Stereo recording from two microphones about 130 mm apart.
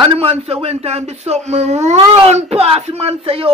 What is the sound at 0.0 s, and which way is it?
Speech, 45° right (ahead or behind).